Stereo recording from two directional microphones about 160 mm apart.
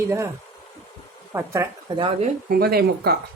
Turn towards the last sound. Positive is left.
turn(degrees=-80)